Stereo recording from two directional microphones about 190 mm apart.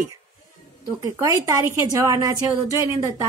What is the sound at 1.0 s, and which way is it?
A woman's voice, 15° right (ahead or behind).